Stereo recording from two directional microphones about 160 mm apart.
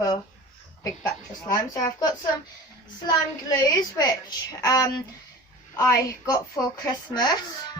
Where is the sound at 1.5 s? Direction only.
25° left (ahead or behind).